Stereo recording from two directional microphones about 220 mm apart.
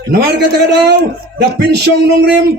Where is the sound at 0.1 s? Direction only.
45° right (ahead or behind).